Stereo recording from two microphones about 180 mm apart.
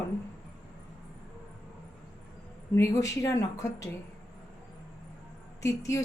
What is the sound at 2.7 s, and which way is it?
A woman's voice, 15° left (ahead or behind).